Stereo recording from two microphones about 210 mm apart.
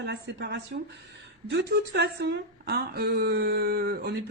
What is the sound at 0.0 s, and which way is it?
Speech, 55° right (ahead or behind).